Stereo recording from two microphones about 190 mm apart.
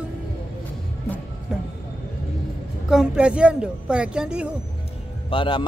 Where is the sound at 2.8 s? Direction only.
5° right (ahead or behind).